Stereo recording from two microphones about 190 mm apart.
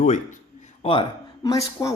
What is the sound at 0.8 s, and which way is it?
Speech, 25° left (ahead or behind).